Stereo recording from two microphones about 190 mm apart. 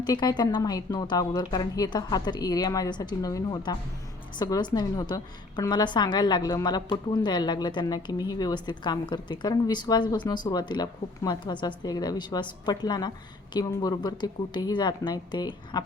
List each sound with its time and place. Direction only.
0.0 s a woman's voice: 20° left (ahead or behind)